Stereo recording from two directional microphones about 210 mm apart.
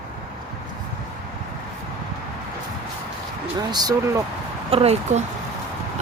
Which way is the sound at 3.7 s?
20° right (ahead or behind).